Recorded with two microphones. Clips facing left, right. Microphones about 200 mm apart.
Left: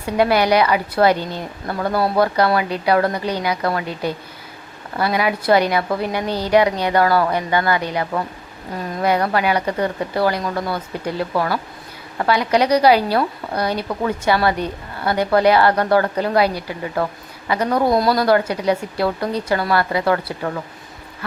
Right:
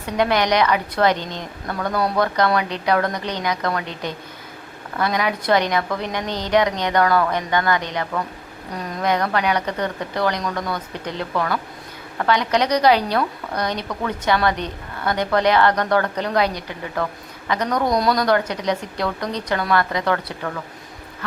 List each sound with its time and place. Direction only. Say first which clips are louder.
0.0 s a woman's voice: left 3 dB; 10° left (ahead or behind)
1.6 s speech: left 3 dB; 25° left (ahead or behind)
2.1 s a woman's voice: left 2 dB; 10° left (ahead or behind)
10.4 s speech: left 2 dB; 25° left (ahead or behind)
10.7 s a woman's voice: left 3 dB; 10° left (ahead or behind)